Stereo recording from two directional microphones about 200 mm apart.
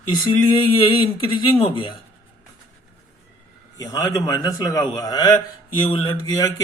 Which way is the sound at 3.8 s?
20° left (ahead or behind).